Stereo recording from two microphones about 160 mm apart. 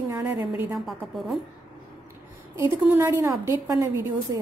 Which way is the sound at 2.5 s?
20° right (ahead or behind).